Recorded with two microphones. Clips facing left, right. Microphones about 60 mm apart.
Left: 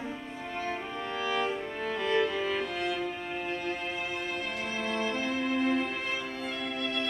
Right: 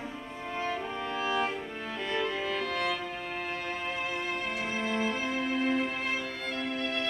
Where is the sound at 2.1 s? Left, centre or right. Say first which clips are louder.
Left 2 dB; centre.